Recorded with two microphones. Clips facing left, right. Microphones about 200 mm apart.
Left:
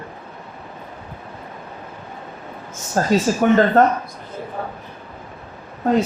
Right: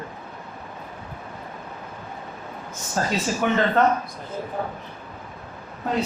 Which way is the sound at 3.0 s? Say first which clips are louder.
Left 7 dB; 45° left (ahead or behind).